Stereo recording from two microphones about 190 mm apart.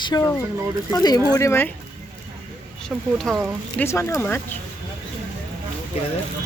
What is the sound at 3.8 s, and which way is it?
Speech, 15° left (ahead or behind).